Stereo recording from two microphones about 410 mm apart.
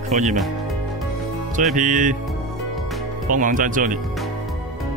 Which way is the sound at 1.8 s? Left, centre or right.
Centre.